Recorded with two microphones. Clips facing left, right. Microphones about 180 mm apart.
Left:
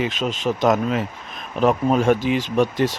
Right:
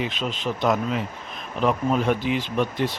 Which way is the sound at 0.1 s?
45° left (ahead or behind).